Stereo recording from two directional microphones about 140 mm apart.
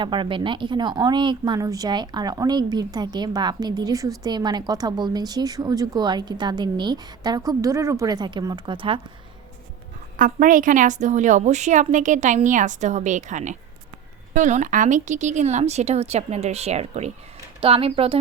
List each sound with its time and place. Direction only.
0.0 s a woman's voice: 35° right (ahead or behind)
10.2 s a woman's voice: 70° right (ahead or behind); by 18.2 s 40° right (ahead or behind)